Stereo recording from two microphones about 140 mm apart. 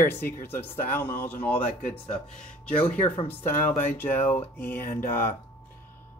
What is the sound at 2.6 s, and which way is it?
Speech, 10° left (ahead or behind).